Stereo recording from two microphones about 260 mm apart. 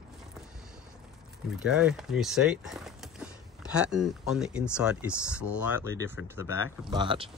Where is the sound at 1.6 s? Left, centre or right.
Centre.